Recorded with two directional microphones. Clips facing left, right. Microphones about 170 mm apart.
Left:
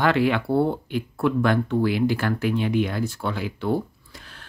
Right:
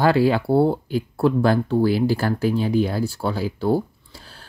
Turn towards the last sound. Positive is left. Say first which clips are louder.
# right 4 dB
turn(degrees=-35)  # may be behind; listen again after turning